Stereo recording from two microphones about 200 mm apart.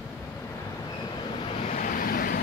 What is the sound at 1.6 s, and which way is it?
Vehicle, 40° left (ahead or behind).